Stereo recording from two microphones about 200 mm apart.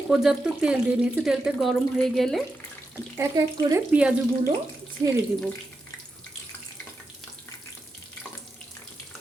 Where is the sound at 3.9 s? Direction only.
5° right (ahead or behind).